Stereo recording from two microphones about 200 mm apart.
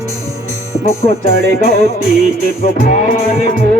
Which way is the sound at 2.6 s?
40° left (ahead or behind).